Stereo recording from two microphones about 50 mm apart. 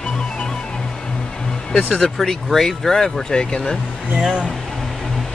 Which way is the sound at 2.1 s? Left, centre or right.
Centre.